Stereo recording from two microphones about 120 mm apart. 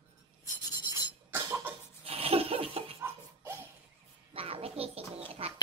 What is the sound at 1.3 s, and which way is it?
Cough, 25° right (ahead or behind).